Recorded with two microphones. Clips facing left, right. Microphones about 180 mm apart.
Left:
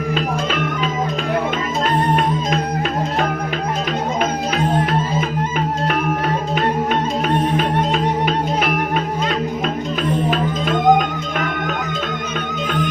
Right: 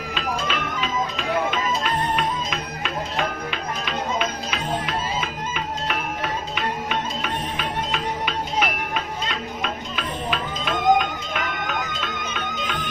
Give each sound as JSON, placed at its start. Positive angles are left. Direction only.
{"t": 1.8, "sound": "music", "side_deg": 45}
{"t": 10.3, "sound": "music", "side_deg": 45}